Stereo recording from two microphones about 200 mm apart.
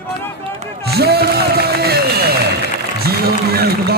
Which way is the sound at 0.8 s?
55° right (ahead or behind).